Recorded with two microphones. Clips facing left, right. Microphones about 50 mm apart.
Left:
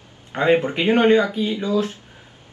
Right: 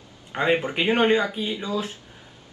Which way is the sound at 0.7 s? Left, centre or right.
Centre.